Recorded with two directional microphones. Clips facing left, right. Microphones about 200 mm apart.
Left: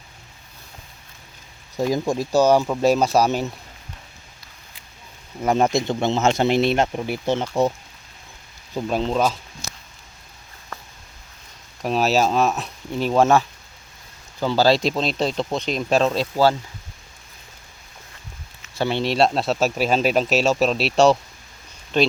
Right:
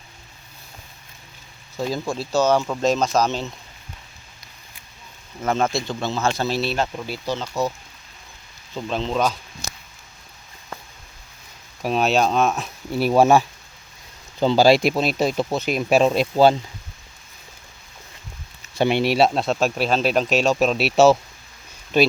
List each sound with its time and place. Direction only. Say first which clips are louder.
1.7 s speech: left 4 dB; 15° left (ahead or behind)
5.4 s speech: left 3 dB; 15° left (ahead or behind)
8.7 s speech: left 2 dB; 5° left (ahead or behind)
11.8 s speech: even; centre (ahead or behind); by 16.6 s 20° right (ahead or behind)
18.8 s speech: right 2 dB; 15° right (ahead or behind)